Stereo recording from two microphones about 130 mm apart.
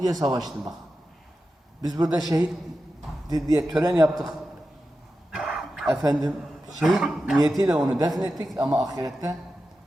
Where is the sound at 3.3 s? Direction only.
30° right (ahead or behind).